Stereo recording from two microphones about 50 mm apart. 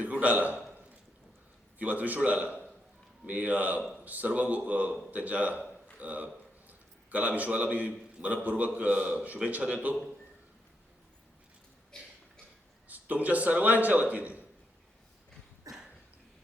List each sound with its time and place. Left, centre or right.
0.0 s a man's voice: right
1.8 s a man's voice: right
11.9 s a sound: centre
12.9 s a man's voice: right